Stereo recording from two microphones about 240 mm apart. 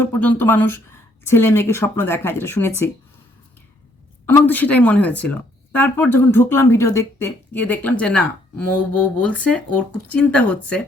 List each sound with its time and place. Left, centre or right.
0.0 s speech: centre
4.3 s speech: centre